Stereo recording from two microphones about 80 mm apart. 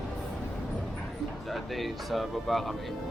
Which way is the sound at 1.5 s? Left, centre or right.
Centre.